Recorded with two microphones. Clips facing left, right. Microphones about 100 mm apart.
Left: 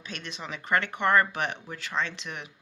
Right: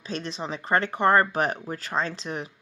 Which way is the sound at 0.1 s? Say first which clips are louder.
Right 7 dB; 35° right (ahead or behind).